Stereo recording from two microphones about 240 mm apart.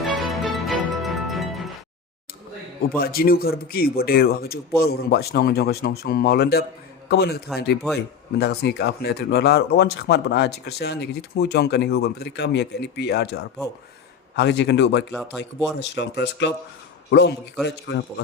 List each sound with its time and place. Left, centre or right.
0.0 s music: centre
3.0 s speech: left
15.1 s speech: centre
15.4 s speech: left